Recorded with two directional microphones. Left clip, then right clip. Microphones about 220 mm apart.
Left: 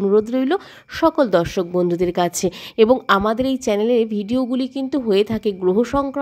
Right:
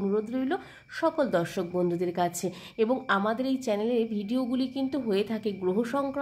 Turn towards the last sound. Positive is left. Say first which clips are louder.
# left 10 dB
turn(degrees=35)  # may be behind; listen again after turning